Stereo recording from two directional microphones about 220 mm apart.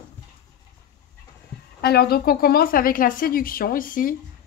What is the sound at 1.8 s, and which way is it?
Speech, 45° left (ahead or behind).